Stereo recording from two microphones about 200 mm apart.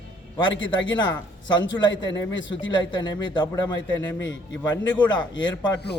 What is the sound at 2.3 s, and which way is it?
Speech, 65° left (ahead or behind).